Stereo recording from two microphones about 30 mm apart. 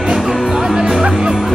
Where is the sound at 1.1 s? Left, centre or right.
Right.